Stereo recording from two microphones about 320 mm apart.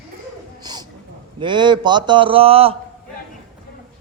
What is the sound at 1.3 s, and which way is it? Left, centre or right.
A man's voice, centre.